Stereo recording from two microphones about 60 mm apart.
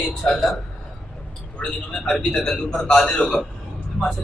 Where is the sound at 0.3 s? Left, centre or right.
Centre.